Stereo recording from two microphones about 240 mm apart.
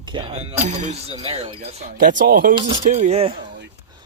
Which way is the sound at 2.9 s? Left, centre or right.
Right.